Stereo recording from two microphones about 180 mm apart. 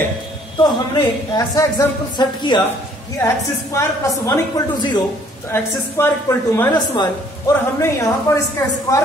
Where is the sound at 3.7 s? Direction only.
15° left (ahead or behind).